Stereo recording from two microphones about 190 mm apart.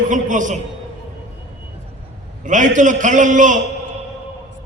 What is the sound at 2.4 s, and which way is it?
A man's voice, 40° right (ahead or behind).